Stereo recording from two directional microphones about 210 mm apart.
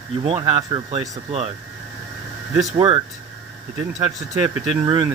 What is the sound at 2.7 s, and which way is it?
Speech, 25° right (ahead or behind).